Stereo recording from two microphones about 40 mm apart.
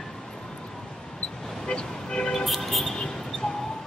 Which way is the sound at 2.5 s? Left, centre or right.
Centre.